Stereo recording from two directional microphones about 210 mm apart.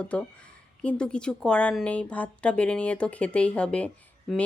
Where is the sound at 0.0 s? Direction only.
5° left (ahead or behind).